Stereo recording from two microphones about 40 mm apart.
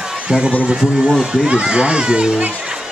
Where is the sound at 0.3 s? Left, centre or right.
Right.